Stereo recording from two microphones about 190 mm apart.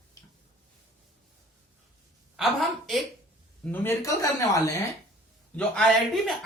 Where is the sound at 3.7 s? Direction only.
10° left (ahead or behind).